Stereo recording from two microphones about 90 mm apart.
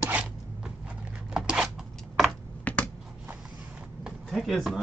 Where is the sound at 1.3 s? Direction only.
5° right (ahead or behind).